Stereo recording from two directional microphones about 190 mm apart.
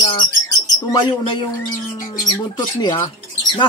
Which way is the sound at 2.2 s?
20° left (ahead or behind).